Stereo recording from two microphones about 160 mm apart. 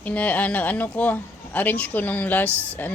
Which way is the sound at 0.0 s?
10° left (ahead or behind).